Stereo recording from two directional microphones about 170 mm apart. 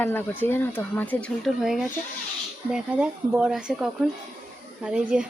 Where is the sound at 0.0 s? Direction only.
10° left (ahead or behind); by 5.3 s 5° right (ahead or behind).